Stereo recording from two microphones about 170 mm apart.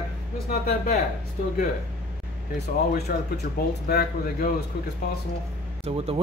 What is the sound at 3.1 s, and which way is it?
Speech, 60° left (ahead or behind).